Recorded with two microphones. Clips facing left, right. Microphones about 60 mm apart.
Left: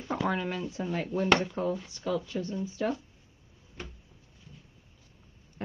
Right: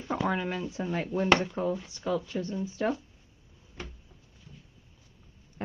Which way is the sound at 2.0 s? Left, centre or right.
Right.